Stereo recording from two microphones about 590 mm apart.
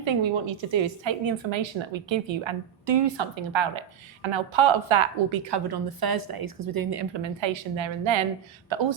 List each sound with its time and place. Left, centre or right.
0.0 s a woman's voice: right